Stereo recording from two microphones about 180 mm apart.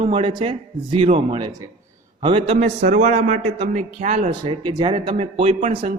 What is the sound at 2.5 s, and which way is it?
Speech, 40° right (ahead or behind).